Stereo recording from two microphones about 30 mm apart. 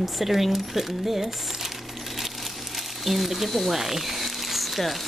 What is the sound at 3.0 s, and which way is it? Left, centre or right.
Speech, centre.